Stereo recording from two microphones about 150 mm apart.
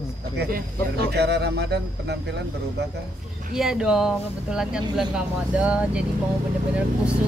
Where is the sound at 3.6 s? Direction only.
5° right (ahead or behind).